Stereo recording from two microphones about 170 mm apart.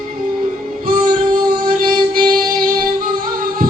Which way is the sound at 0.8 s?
55° right (ahead or behind).